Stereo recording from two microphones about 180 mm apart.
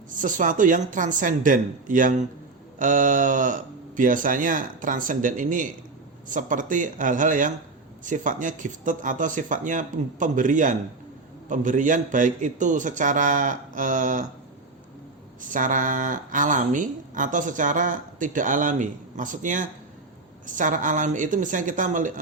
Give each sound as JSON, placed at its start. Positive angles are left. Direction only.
{"t": 0.2, "sound": "speech", "side_deg": -45}
{"t": 15.4, "sound": "speech", "side_deg": -45}